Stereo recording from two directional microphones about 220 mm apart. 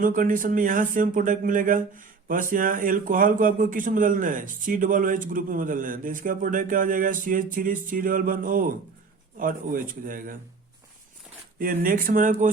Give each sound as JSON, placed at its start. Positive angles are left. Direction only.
{"t": 0.0, "sound": "speech", "side_deg": -40}
{"t": 11.6, "sound": "speech", "side_deg": -40}